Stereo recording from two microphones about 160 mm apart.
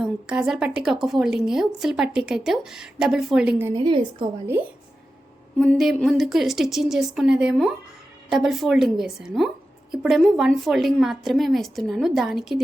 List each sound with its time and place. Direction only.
0.0 s a woman's voice: 5° right (ahead or behind)
3.8 s a woman's voice: 30° right (ahead or behind)
5.5 s a woman's voice: centre (ahead or behind)